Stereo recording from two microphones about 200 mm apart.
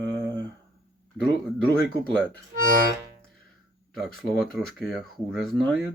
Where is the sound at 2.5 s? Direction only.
45° right (ahead or behind).